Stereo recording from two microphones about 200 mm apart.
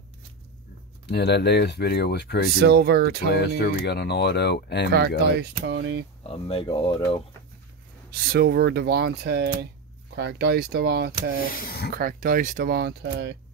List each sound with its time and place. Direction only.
1.0 s speech: 55° left (ahead or behind)
2.6 s speech: 55° right (ahead or behind)
3.3 s speech: 55° left (ahead or behind)
4.9 s speech: 55° right (ahead or behind)
6.4 s speech: 25° left (ahead or behind)
8.1 s speech: 50° right (ahead or behind)
11.5 s speech: 50° left (ahead or behind)
11.9 s speech: 45° right (ahead or behind)